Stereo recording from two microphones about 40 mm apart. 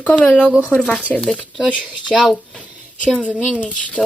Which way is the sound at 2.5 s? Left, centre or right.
Right.